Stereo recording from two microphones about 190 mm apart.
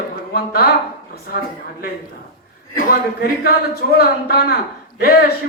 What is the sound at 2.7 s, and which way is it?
A woman's voice, 50° left (ahead or behind).